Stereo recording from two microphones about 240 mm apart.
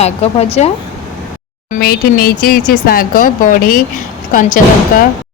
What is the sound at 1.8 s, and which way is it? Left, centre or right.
Speech, left.